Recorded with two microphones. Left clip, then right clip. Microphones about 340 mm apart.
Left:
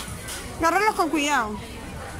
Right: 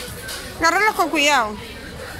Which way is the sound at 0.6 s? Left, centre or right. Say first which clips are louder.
Right 4 dB; centre.